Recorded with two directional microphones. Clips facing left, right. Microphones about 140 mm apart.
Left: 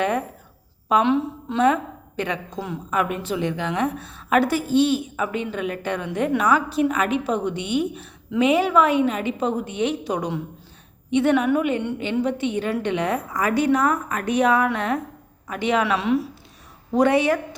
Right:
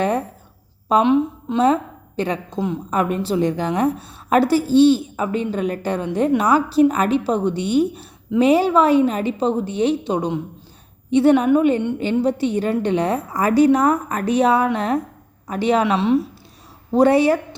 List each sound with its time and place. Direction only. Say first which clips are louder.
0.0 s a woman's voice: right 3 dB; 35° right (ahead or behind)
1.0 s a woman's voice: right 4 dB; 15° right (ahead or behind)
1.6 s a woman's voice: right 1 dB; 35° right (ahead or behind)